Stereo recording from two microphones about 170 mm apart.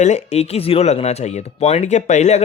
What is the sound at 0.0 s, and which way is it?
Speech, 40° left (ahead or behind).